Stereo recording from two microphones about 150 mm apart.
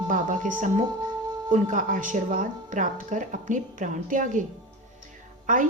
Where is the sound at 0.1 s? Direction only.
60° right (ahead or behind).